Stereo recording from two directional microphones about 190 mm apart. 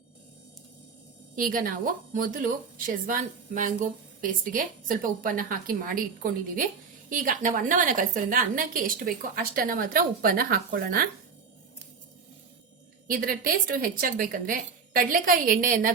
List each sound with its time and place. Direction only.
1.4 s a woman's voice: 45° right (ahead or behind)
13.1 s a woman's voice: 50° right (ahead or behind)